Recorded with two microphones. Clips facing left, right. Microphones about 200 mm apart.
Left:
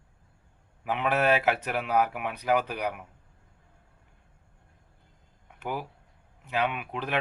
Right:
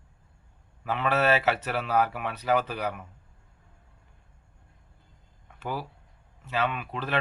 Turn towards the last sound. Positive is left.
turn(degrees=15)  # may be behind; listen again after turning